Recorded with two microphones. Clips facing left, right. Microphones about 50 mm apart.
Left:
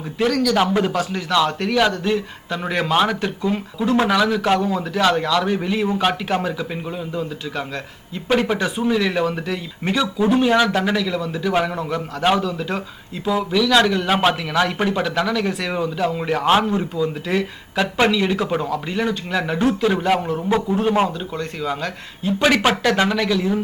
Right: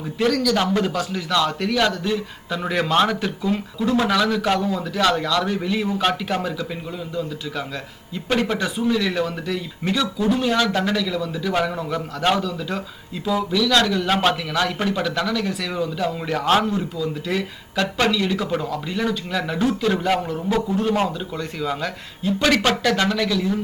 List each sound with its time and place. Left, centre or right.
0.2 s speech: centre
5.9 s a man's voice: centre
8.1 s speech: centre
21.3 s speech: centre